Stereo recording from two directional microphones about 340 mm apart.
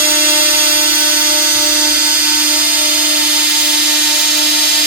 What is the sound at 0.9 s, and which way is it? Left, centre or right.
Dental drill, left.